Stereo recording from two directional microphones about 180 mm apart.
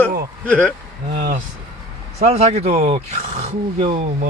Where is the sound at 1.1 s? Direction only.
50° right (ahead or behind).